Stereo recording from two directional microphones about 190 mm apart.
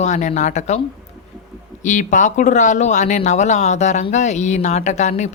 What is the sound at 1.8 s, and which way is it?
Speech, 40° left (ahead or behind).